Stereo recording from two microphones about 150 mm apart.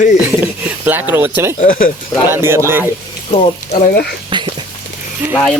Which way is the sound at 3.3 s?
45° left (ahead or behind).